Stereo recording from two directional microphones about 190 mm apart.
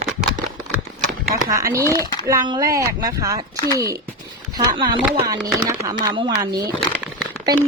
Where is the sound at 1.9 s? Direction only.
20° left (ahead or behind).